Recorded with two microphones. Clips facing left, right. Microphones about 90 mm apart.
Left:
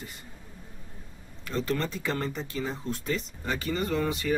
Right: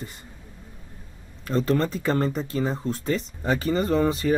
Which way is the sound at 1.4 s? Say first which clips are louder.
Right 7 dB; 35° right (ahead or behind).